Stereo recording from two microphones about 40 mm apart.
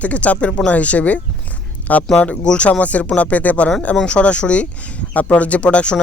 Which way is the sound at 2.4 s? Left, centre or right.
Left.